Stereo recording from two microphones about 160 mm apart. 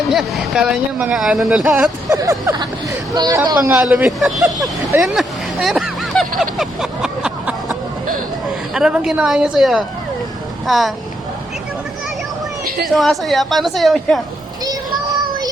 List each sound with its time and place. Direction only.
0.1 s speech: centre (ahead or behind)
2.0 s speech: 20° right (ahead or behind)
3.8 s speech: 5° right (ahead or behind)
4.9 s speech: 15° right (ahead or behind)
5.6 s a sound: centre (ahead or behind)
8.7 s speech: 5° right (ahead or behind)
12.8 s speech: centre (ahead or behind)